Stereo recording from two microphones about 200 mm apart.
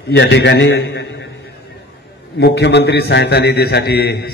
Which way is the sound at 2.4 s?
60° left (ahead or behind).